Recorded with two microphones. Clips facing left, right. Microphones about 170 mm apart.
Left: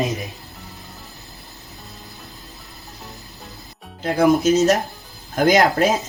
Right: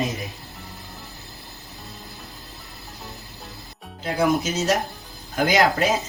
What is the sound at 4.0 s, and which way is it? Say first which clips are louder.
Speech: left 6 dB; 45° left (ahead or behind).